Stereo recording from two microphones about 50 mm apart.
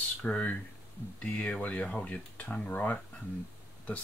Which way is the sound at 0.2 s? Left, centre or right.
Left.